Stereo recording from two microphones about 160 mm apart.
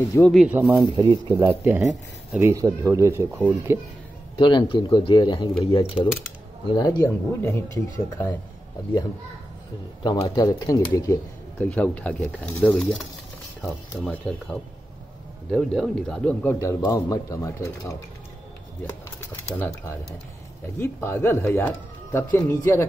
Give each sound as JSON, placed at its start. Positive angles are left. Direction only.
{"t": 0.2, "sound": "speech", "side_deg": 0}
{"t": 0.5, "sound": "speech", "side_deg": -10}
{"t": 0.9, "sound": "speech", "side_deg": -30}
{"t": 1.6, "sound": "speech", "side_deg": -10}
{"t": 4.4, "sound": "speech", "side_deg": 30}
{"t": 7.0, "sound": "speech", "side_deg": 15}
{"t": 10.0, "sound": "speech", "side_deg": 25}
{"t": 11.6, "sound": "speech", "side_deg": 10}
{"t": 16.5, "sound": "speech", "side_deg": 20}
{"t": 19.5, "sound": "speech", "side_deg": 10}